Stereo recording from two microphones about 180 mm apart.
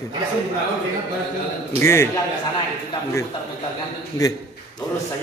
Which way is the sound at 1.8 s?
15° left (ahead or behind).